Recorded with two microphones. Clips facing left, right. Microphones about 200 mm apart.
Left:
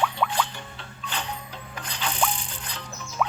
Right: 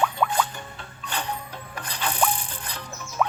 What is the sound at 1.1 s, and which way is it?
Music, 55° right (ahead or behind).